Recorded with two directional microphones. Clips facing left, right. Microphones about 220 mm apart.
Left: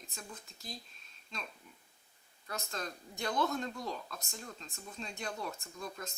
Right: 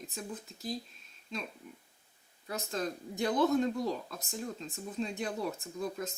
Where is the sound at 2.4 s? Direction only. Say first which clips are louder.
Right 6 dB; 5° right (ahead or behind).